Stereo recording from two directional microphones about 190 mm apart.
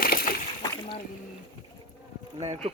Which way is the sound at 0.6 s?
25° left (ahead or behind).